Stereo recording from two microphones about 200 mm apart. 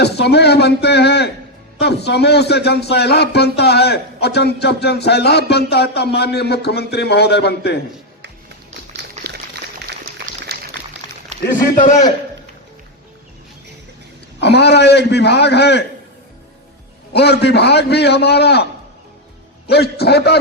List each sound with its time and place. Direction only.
0.0 s speech: 55° left (ahead or behind)
9.0 s a sound: 55° right (ahead or behind)
10.4 s a sound: 55° right (ahead or behind)
11.8 s a man's voice: 40° left (ahead or behind)
14.4 s speech: 55° left (ahead or behind)
17.1 s speech: 55° left (ahead or behind)
19.6 s a man's voice: 55° left (ahead or behind)